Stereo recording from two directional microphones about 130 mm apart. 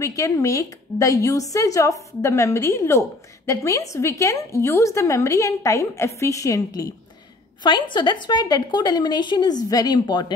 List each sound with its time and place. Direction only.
0.0 s a woman's voice: 25° left (ahead or behind)
7.6 s a woman's voice: 35° left (ahead or behind)